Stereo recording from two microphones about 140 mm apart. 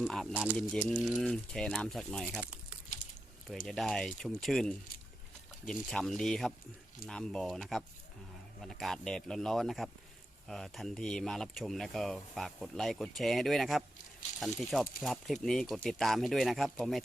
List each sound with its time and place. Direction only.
0.0 s speech: centre (ahead or behind)
2.4 s a sound: 10° right (ahead or behind)
3.7 s speech: 5° left (ahead or behind)
5.9 s speech: 5° left (ahead or behind)